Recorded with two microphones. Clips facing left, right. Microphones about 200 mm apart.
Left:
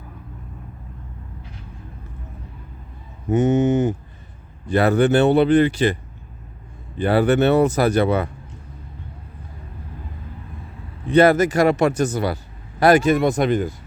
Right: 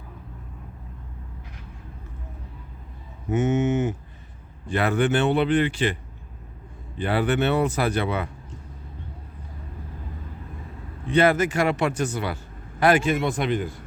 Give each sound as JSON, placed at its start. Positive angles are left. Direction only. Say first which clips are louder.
{"t": 3.2, "sound": "cattle", "louder": "left 5 dB", "side_deg": 35}
{"t": 4.6, "sound": "speech", "louder": "left 6 dB", "side_deg": 40}
{"t": 7.0, "sound": "speech", "louder": "left 6 dB", "side_deg": 40}
{"t": 11.1, "sound": "speech", "louder": "left 5 dB", "side_deg": 40}